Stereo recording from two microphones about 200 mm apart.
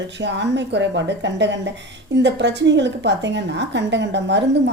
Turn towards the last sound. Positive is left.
turn(degrees=-60)  # may be behind; listen again after turning